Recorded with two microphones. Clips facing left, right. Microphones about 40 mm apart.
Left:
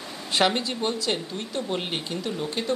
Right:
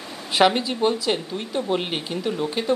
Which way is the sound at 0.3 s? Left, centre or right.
Centre.